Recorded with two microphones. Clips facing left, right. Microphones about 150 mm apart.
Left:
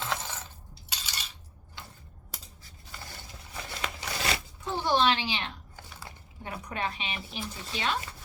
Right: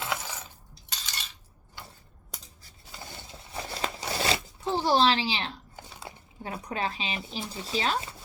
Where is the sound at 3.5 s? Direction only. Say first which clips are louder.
Right 4 dB; 30° right (ahead or behind).